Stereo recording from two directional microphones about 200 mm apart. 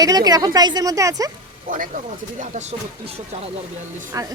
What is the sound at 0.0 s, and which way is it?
A woman's voice, 20° right (ahead or behind).